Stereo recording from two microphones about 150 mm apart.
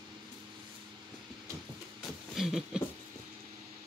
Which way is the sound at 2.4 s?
Centre (ahead or behind).